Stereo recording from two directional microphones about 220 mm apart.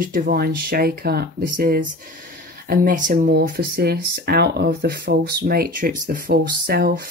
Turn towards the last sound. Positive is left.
turn(degrees=-40)  # may be behind; listen again after turning